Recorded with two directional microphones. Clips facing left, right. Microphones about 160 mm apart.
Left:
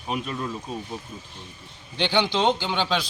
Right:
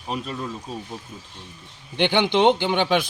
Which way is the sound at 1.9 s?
55° right (ahead or behind).